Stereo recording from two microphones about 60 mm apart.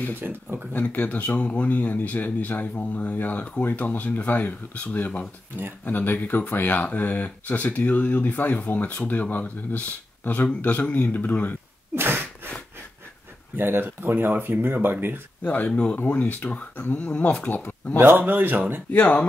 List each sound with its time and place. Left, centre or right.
0.2 s speech: right
0.7 s speech: left
11.9 s a sound: right
13.6 s speech: right
15.4 s speech: left
17.9 s speech: right
18.9 s speech: left